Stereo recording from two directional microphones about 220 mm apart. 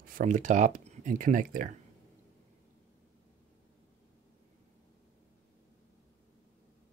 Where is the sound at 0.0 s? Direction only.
35° right (ahead or behind).